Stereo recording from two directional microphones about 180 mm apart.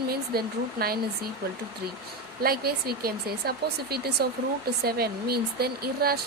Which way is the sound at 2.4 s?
55° right (ahead or behind).